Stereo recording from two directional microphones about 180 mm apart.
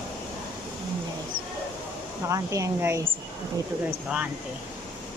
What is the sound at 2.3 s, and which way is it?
Speech, 15° right (ahead or behind).